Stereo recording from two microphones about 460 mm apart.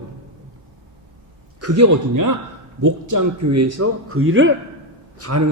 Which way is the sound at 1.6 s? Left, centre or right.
Right.